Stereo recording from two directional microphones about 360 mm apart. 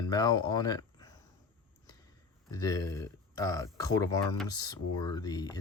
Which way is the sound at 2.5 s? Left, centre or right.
Centre.